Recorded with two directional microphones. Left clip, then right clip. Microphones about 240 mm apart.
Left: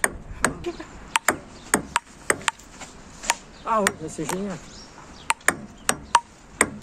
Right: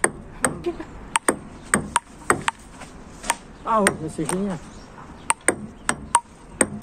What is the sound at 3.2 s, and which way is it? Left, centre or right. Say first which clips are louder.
Chopping: right 1 dB; centre.